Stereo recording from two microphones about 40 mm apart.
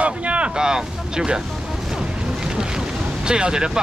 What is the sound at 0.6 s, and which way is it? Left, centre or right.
Speech, centre.